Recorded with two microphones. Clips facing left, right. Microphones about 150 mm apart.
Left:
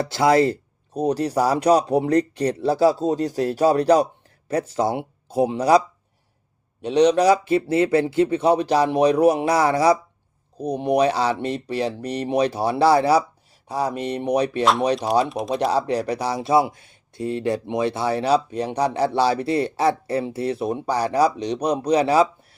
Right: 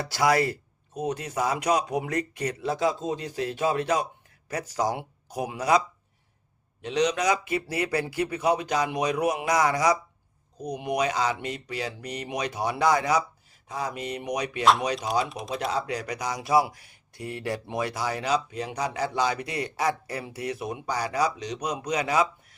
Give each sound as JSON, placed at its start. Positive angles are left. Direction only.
{"t": 0.1, "sound": "speech", "side_deg": 25}
{"t": 6.8, "sound": "speech", "side_deg": 35}
{"t": 14.6, "sound": "speech", "side_deg": 0}
{"t": 15.6, "sound": "speech", "side_deg": 35}